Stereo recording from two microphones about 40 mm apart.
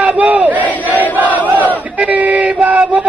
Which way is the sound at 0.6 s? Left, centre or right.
Left.